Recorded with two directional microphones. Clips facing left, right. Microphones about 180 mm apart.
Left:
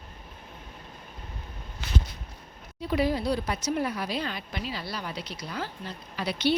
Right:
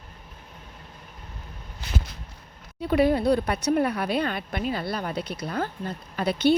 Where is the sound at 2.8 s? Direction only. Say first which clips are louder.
Right 5 dB; 60° right (ahead or behind).